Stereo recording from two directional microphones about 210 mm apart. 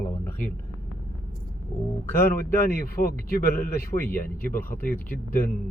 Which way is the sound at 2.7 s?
45° left (ahead or behind).